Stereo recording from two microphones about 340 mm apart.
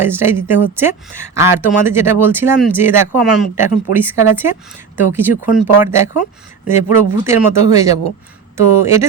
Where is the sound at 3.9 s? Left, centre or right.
Right.